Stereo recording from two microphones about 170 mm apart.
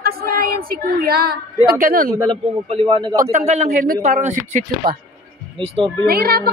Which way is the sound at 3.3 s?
45° right (ahead or behind).